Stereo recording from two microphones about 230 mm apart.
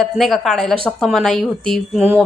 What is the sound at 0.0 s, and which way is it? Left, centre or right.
A woman's voice, centre.